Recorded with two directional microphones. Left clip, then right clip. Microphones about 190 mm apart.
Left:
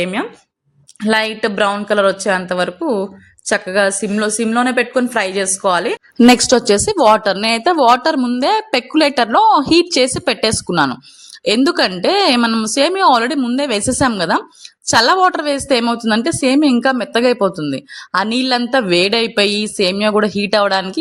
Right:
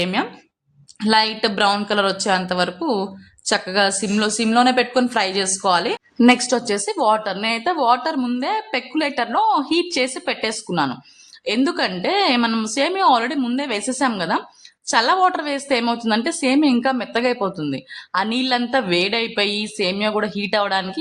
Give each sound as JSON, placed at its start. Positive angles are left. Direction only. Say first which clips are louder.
{"t": 0.0, "sound": "a woman's voice", "louder": "left 2 dB", "side_deg": 15}
{"t": 6.1, "sound": "a woman's voice", "louder": "left 6 dB", "side_deg": 40}